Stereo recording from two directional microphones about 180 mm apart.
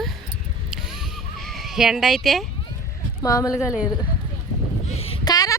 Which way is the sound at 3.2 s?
20° left (ahead or behind).